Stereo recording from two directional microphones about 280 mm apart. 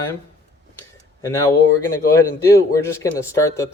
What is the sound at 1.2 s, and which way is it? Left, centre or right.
A man's voice, centre.